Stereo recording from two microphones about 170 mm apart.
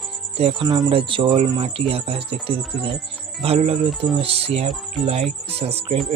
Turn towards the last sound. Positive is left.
turn(degrees=-35)  # may be behind; listen again after turning